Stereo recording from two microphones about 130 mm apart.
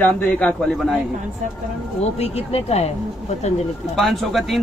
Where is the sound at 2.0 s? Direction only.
50° left (ahead or behind).